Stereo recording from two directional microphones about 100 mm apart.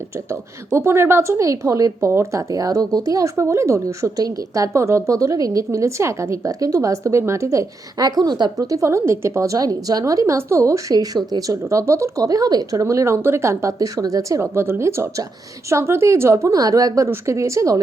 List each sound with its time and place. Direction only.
0.3 s a woman's voice: 30° right (ahead or behind)